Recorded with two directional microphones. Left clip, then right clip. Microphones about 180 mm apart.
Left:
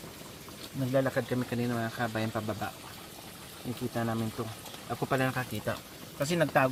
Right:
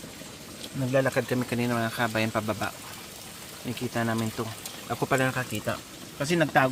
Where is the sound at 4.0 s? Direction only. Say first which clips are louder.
Right 5 dB; 20° right (ahead or behind).